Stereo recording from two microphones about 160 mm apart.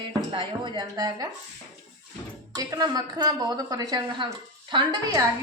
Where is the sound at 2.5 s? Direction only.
25° right (ahead or behind).